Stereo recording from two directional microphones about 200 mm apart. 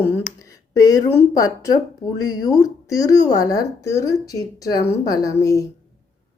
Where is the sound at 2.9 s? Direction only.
15° left (ahead or behind).